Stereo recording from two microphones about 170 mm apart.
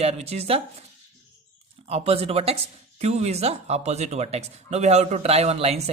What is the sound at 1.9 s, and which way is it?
Speech, 35° right (ahead or behind).